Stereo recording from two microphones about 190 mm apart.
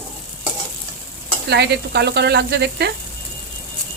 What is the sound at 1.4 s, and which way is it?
Speech, 60° right (ahead or behind).